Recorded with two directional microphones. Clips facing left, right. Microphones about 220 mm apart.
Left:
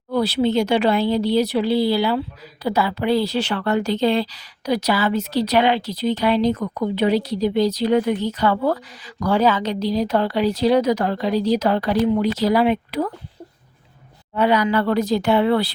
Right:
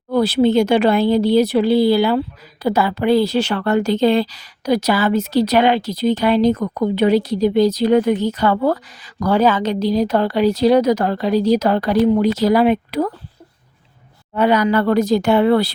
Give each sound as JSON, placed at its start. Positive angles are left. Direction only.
{"t": 0.1, "sound": "speech", "side_deg": -50}
{"t": 14.3, "sound": "speech", "side_deg": -45}